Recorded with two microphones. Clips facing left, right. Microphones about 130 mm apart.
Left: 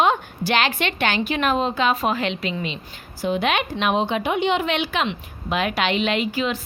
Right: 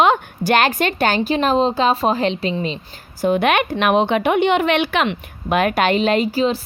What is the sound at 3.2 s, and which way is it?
A woman's voice, 55° right (ahead or behind).